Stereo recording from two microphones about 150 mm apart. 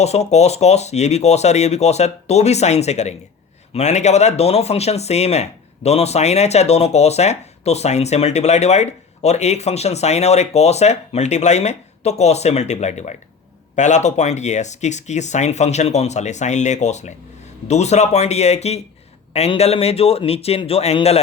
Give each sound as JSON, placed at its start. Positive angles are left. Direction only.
{"t": 0.0, "sound": "speech", "side_deg": 45}